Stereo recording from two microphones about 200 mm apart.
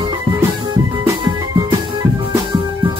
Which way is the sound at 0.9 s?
20° right (ahead or behind).